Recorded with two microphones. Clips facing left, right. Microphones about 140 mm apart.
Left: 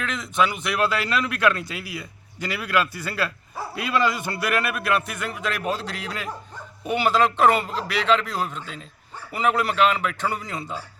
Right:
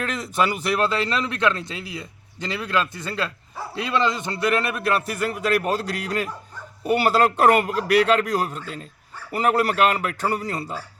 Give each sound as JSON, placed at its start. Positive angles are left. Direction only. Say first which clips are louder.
{"t": 0.0, "sound": "a man's voice", "louder": "even", "side_deg": -40}